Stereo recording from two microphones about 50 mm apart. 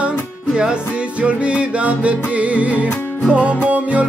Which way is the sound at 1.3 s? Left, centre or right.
Right.